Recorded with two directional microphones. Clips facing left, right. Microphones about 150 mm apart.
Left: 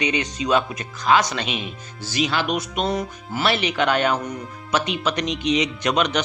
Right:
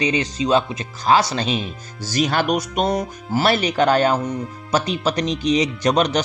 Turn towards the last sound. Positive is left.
turn(degrees=-35)  # may be behind; listen again after turning